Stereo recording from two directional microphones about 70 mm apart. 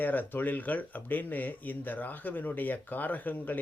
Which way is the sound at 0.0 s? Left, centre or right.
Left.